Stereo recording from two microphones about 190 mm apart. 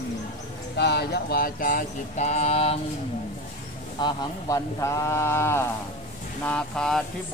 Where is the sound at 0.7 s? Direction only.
60° left (ahead or behind); by 2.8 s 30° left (ahead or behind).